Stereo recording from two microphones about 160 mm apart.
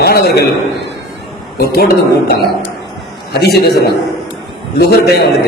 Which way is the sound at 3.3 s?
90° left.